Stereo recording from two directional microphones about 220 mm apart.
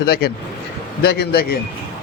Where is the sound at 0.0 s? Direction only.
45° left (ahead or behind).